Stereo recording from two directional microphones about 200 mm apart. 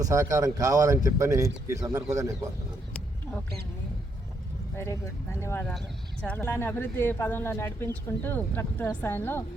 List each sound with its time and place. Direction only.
0.0 s speech: 15° right (ahead or behind)
4.8 s speech: 15° left (ahead or behind)